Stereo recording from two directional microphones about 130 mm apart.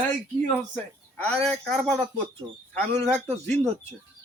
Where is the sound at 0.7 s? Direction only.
10° left (ahead or behind).